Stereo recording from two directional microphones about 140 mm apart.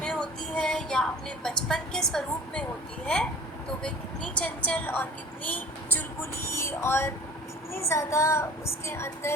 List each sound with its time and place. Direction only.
0.0 s music: 5° left (ahead or behind)
3.8 s a woman's voice: 10° left (ahead or behind)
7.9 s child singing: 20° left (ahead or behind)